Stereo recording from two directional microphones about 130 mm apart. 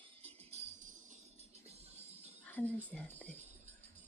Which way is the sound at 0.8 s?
80° right.